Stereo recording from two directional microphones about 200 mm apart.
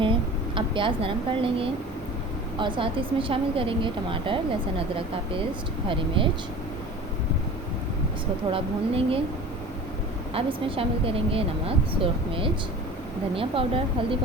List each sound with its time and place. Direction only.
0.0 s speech: 25° right (ahead or behind)
6.2 s speech: 25° right (ahead or behind)
8.5 s speech: 25° right (ahead or behind)
10.3 s speech: 30° right (ahead or behind)
13.3 s speech: 25° right (ahead or behind)